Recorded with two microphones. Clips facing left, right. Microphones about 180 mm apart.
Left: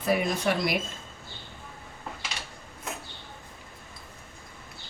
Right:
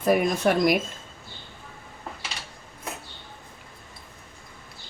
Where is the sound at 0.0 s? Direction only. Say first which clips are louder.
Right 5 dB; 50° right (ahead or behind).